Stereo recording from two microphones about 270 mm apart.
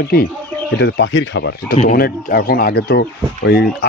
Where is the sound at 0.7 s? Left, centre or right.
Left.